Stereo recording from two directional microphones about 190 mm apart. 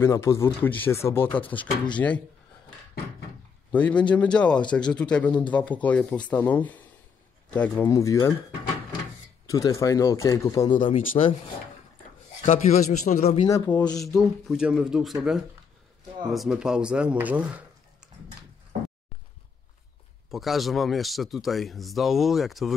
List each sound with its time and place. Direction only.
0.0 s speech: 15° left (ahead or behind)
3.7 s speech: 5° left (ahead or behind)
9.5 s speech: 15° left (ahead or behind)
12.4 s a man's voice: 35° left (ahead or behind)
13.7 s speech: 5° left (ahead or behind)
20.2 s speech: centre (ahead or behind)